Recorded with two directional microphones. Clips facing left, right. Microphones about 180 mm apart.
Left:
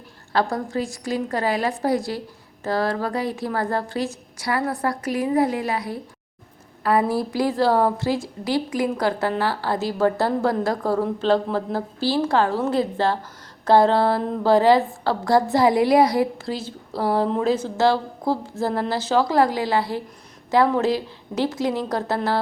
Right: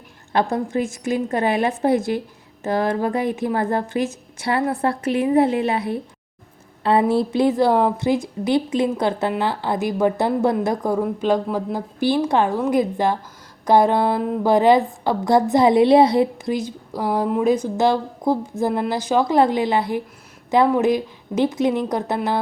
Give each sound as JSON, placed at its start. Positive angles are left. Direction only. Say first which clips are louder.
{"t": 0.3, "sound": "a woman's voice", "louder": "right 2 dB", "side_deg": -20}
{"t": 7.1, "sound": "a woman's voice", "louder": "right 5 dB", "side_deg": -25}